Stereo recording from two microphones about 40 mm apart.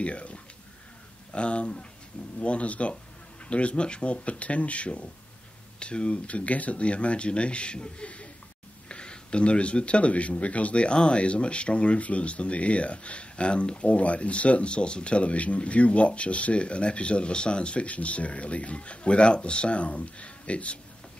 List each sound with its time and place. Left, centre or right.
0.0 s speech: left